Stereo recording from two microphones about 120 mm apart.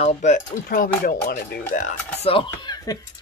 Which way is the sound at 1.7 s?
90° left.